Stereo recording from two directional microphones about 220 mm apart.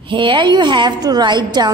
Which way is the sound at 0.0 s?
20° right (ahead or behind).